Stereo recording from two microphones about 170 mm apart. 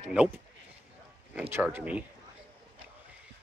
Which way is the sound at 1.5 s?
10° right (ahead or behind).